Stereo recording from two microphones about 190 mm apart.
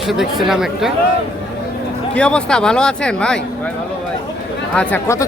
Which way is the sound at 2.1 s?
5° left (ahead or behind).